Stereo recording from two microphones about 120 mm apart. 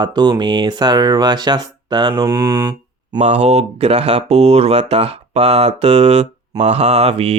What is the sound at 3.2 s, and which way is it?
Speech, 65° right (ahead or behind).